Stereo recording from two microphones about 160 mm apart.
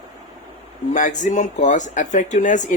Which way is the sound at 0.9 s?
50° left (ahead or behind).